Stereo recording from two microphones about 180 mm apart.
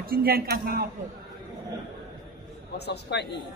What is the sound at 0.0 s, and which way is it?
Speech, 55° right (ahead or behind).